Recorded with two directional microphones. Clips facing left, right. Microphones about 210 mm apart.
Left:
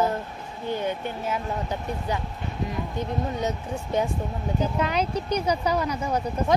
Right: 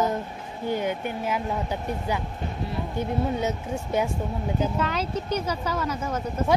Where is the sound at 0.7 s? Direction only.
15° right (ahead or behind).